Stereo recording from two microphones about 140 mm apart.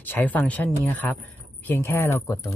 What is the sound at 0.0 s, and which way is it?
Speech, 15° left (ahead or behind).